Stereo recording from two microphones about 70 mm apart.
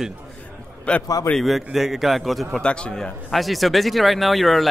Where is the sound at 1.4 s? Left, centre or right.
Centre.